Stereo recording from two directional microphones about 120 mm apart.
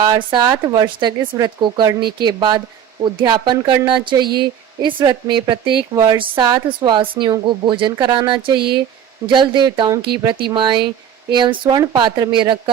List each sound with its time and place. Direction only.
0.3 s speech: 35° right (ahead or behind)